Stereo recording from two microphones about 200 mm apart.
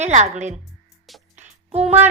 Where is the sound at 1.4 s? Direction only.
30° right (ahead or behind).